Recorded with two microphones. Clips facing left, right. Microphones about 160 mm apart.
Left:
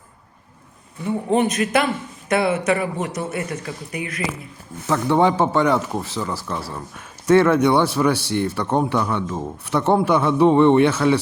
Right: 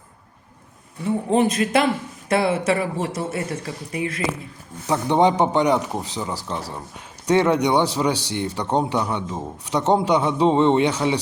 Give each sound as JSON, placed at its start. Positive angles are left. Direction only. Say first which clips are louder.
{"t": 1.3, "sound": "a man's voice", "louder": "even", "side_deg": -25}